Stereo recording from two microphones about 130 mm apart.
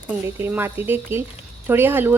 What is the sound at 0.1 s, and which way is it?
Speech, 15° right (ahead or behind).